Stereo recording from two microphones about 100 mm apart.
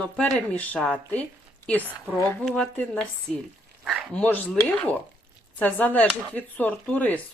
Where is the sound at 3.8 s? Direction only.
Centre (ahead or behind).